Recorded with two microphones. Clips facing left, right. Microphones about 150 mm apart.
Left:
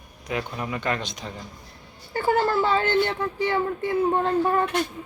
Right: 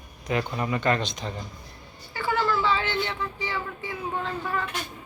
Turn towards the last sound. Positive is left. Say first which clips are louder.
# left 9 dB
turn(degrees=50)  # may be behind; listen again after turning